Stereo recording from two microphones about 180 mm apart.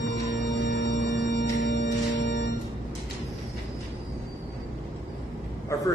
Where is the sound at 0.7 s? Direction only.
70° left (ahead or behind).